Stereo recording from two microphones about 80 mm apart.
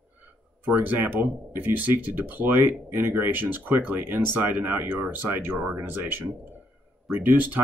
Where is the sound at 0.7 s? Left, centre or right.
Right.